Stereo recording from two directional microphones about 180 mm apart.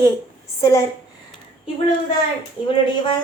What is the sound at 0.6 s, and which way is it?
Speech, 15° left (ahead or behind).